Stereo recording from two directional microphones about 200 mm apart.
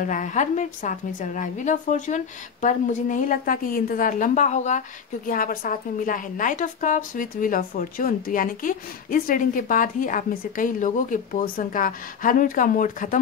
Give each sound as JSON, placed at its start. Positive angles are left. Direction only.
{"t": 0.0, "sound": "a woman's voice", "side_deg": 40}